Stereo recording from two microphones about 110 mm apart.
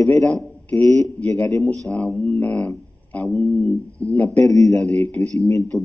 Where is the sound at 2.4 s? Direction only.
10° left (ahead or behind).